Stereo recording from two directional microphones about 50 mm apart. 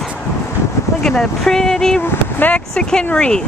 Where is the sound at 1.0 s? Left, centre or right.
Centre.